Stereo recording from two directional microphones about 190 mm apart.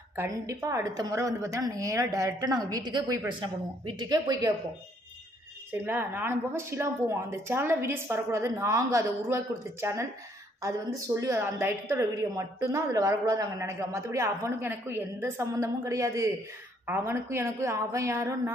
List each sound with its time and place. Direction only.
0.1 s a woman's voice: 15° right (ahead or behind)
5.7 s a woman's voice: 10° right (ahead or behind)